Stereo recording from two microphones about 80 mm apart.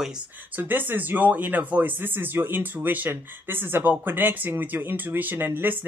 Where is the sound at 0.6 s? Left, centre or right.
Right.